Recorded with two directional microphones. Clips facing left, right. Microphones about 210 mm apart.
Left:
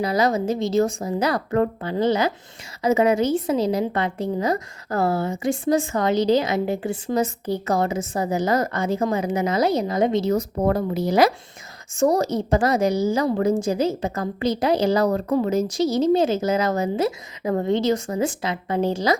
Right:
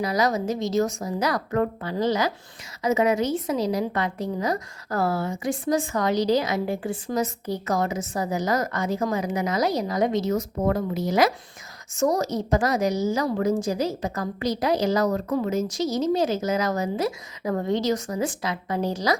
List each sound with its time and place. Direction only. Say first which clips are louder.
0.0 s a woman's voice: left 3 dB; 30° left (ahead or behind)